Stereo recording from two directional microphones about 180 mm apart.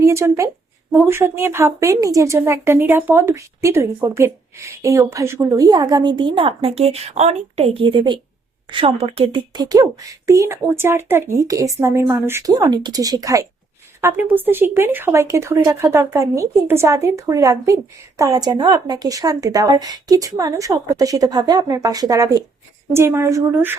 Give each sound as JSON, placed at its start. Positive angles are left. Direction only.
{"t": 0.0, "sound": "a woman's voice", "side_deg": -15}